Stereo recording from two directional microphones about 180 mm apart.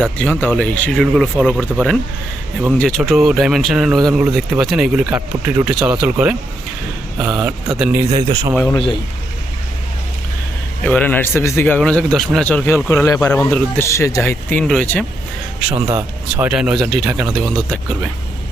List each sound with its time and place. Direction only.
0.0 s speech: 5° left (ahead or behind)
3.0 s speech: centre (ahead or behind)
8.1 s a man's voice: 20° right (ahead or behind)
10.8 s a man's voice: 10° left (ahead or behind)
15.9 s speech: 20° right (ahead or behind)
16.5 s speech: 5° right (ahead or behind)
17.3 s speech: 5° left (ahead or behind)